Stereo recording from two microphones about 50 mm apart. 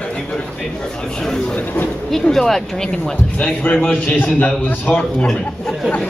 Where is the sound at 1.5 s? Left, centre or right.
Left.